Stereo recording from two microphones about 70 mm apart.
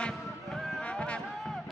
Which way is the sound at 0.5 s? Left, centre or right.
Centre.